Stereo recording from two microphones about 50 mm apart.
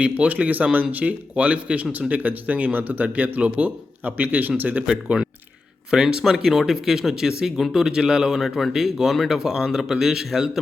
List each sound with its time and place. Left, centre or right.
0.0 s speech: right
5.0 s speech: centre